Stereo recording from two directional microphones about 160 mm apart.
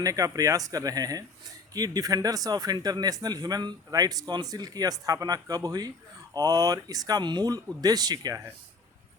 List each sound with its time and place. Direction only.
0.0 s speech: 20° right (ahead or behind)